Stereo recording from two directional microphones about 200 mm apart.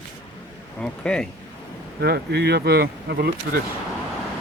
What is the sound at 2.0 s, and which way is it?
Speech, 55° right (ahead or behind).